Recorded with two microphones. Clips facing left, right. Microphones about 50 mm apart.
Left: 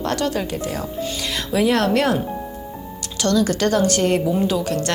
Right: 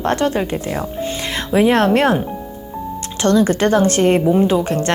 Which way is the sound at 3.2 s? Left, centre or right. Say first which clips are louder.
Right 4 dB; right.